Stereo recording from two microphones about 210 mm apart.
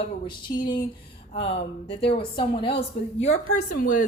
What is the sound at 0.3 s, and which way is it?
A woman's voice, 20° left (ahead or behind).